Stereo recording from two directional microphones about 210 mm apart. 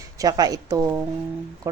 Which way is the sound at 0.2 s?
15° right (ahead or behind).